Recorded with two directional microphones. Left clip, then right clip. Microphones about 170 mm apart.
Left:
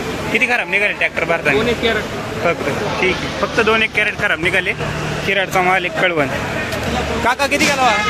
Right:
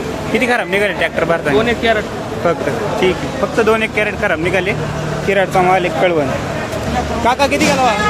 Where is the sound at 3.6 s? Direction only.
10° right (ahead or behind).